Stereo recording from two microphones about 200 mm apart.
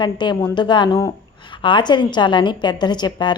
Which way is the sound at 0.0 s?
20° left (ahead or behind).